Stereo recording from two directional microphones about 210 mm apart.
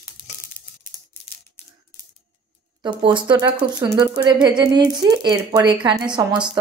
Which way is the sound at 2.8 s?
20° right (ahead or behind).